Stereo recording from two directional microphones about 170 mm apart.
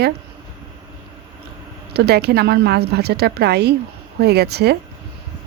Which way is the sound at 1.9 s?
70° right (ahead or behind).